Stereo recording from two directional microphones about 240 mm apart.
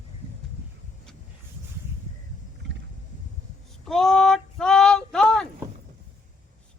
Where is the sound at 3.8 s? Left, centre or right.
Centre.